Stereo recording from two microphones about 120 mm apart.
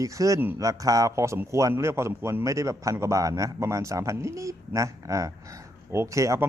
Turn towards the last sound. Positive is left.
turn(degrees=-25)  # may be behind; listen again after turning